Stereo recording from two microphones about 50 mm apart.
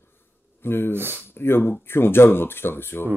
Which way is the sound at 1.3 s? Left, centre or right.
Left.